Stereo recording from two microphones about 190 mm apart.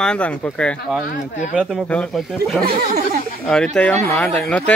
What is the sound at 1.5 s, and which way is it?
Speech, 5° right (ahead or behind).